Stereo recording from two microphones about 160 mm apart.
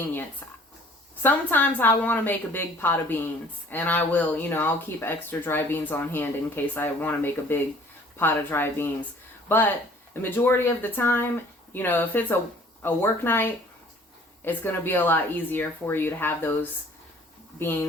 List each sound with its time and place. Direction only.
0.1 s speech: 10° left (ahead or behind)
10.2 s speech: 10° left (ahead or behind)